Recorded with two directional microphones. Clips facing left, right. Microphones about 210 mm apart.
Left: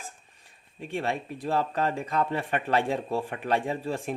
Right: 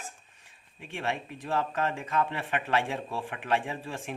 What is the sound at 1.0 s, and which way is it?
Speech, 35° left (ahead or behind).